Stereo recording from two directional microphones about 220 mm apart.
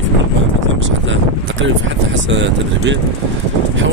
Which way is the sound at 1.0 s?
60° right (ahead or behind).